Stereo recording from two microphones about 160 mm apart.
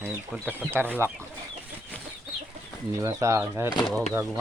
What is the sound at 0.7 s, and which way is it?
Speech, 15° right (ahead or behind).